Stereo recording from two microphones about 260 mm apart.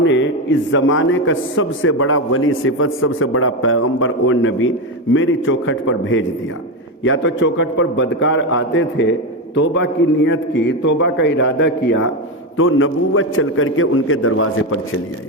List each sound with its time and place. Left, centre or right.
0.0 s a man's voice: left